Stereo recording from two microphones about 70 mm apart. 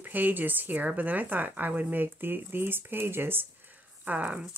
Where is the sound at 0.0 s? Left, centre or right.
Right.